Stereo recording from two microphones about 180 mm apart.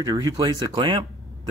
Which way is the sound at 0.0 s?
20° right (ahead or behind).